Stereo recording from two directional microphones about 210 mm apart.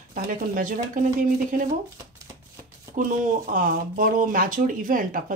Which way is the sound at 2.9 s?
40° right (ahead or behind).